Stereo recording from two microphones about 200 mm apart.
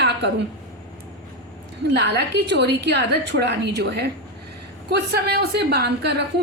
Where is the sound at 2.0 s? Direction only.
55° right (ahead or behind).